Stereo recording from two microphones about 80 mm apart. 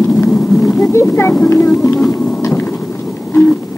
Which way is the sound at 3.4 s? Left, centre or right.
Centre.